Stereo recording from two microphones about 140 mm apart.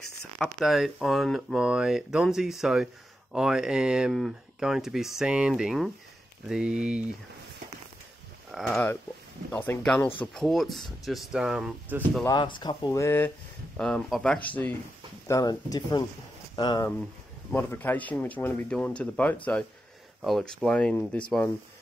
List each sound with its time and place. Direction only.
0.4 s speech: centre (ahead or behind)
8.5 s speech: centre (ahead or behind)
9.5 s speech: 15° left (ahead or behind); by 12.3 s 5° right (ahead or behind)
12.3 s speech: 35° left (ahead or behind); by 13.3 s 15° left (ahead or behind)
13.7 s speech: 5° left (ahead or behind)
15.2 s speech: 25° left (ahead or behind)
17.5 s speech: 10° left (ahead or behind)